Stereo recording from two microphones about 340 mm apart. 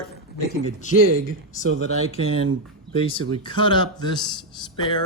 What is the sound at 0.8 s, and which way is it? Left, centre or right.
Speech, left.